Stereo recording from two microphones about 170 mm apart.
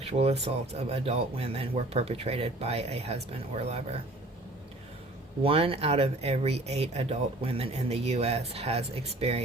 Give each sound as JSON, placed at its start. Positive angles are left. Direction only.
{"t": 0.0, "sound": "speech", "side_deg": -40}
{"t": 5.4, "sound": "speech", "side_deg": -35}